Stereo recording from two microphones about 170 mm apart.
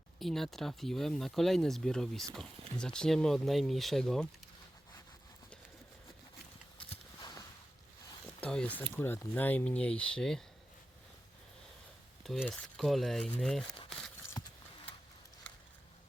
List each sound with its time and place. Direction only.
0.2 s speech: centre (ahead or behind)
6.7 s a sound: 30° left (ahead or behind)
8.4 s speech: 5° left (ahead or behind)
12.2 s speech: centre (ahead or behind)